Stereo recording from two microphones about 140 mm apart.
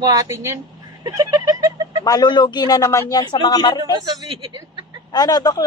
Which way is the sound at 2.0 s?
30° left (ahead or behind).